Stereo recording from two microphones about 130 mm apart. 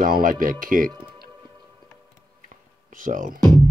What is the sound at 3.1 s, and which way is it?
Speech, 80° right.